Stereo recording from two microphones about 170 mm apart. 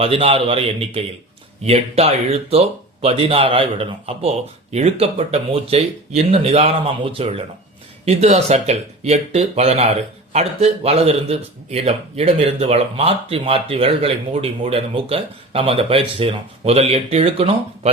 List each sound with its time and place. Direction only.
0.0 s speech: 35° right (ahead or behind)